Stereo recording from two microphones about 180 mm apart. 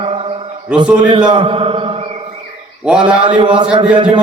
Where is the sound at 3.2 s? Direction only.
25° right (ahead or behind).